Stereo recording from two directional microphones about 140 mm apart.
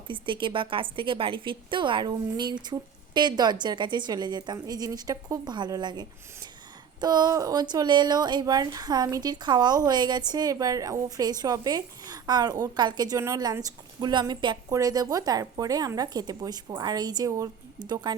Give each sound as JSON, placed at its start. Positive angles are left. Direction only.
{"t": 0.1, "sound": "a woman's voice", "side_deg": -35}